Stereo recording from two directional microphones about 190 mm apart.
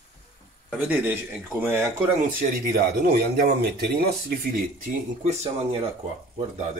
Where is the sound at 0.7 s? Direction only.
10° right (ahead or behind).